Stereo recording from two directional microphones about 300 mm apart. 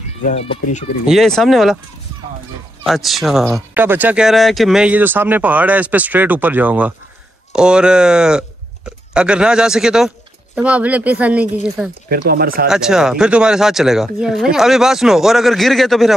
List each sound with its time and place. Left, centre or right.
0.2 s speech: left
1.0 s speech: centre
2.8 s speech: centre
12.1 s speech: right
12.6 s speech: centre